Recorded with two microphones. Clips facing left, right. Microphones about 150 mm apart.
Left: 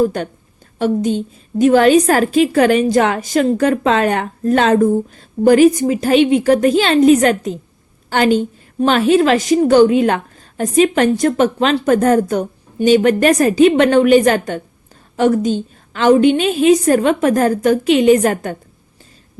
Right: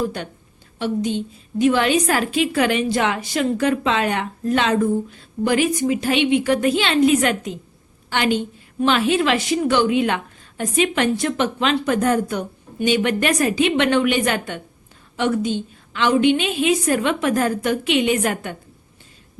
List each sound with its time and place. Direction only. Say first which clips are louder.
0.0 s a woman's voice: left 8 dB; 45° left (ahead or behind)